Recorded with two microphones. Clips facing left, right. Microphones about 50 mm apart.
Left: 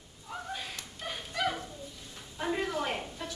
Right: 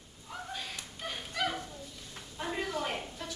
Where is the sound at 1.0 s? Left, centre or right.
Centre.